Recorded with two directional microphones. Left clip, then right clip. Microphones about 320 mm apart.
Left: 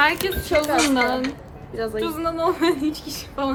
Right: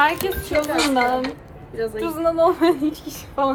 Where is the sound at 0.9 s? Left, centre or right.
Centre.